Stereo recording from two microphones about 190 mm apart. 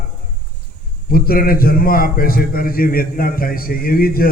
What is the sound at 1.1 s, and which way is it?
A man's voice, 50° left (ahead or behind).